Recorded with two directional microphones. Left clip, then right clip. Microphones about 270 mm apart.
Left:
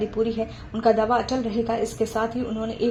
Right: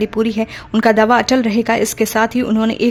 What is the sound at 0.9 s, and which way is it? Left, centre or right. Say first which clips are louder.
Speech: right 12 dB; right.